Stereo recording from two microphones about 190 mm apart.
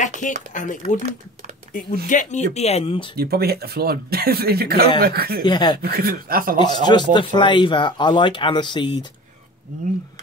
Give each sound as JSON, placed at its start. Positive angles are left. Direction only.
{"t": 0.5, "sound": "speech", "side_deg": 40}
{"t": 3.2, "sound": "speech", "side_deg": -55}
{"t": 5.4, "sound": "speech", "side_deg": 25}
{"t": 5.8, "sound": "speech", "side_deg": -55}
{"t": 6.6, "sound": "speech", "side_deg": 25}